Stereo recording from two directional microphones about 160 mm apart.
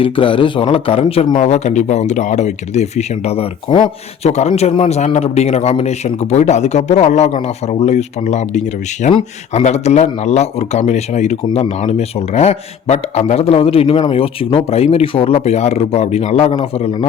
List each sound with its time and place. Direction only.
0.0 s a man's voice: 35° left (ahead or behind)